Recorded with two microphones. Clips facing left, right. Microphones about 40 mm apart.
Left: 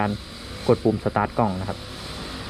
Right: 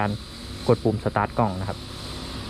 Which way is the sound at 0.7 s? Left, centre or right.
Left.